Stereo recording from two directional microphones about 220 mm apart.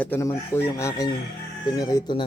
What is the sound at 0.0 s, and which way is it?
Speech, 10° left (ahead or behind).